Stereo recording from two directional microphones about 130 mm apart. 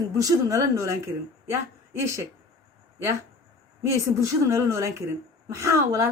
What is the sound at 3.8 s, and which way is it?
Speech, 20° right (ahead or behind).